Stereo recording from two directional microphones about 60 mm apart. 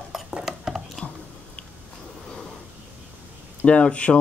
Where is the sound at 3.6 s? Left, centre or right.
Left.